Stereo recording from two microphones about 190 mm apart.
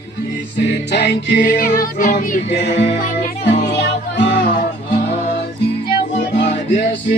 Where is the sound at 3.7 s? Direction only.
65° left (ahead or behind).